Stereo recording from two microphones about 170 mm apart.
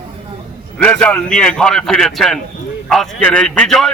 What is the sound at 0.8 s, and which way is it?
A man's voice, 5° left (ahead or behind).